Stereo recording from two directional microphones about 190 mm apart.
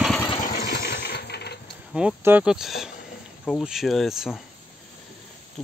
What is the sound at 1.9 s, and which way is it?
Speech, 5° right (ahead or behind).